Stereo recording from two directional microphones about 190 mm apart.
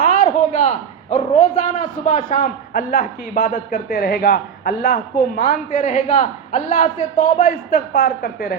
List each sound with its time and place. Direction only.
0.0 s a man's voice: 40° left (ahead or behind)